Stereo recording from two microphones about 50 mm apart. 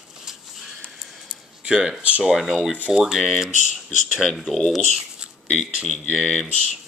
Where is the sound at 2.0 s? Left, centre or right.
Right.